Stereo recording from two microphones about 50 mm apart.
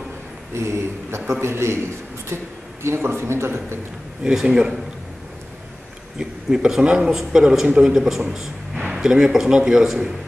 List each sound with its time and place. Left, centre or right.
0.6 s a man's voice: right
4.2 s a man's voice: centre
6.1 s a man's voice: centre